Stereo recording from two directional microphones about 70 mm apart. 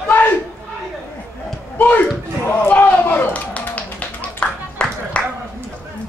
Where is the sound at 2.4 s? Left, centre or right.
Left.